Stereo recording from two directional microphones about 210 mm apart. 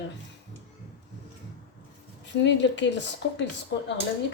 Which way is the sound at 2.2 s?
60° left (ahead or behind).